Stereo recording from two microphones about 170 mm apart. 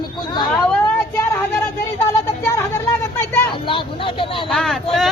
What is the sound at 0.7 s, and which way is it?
Speech, 15° left (ahead or behind).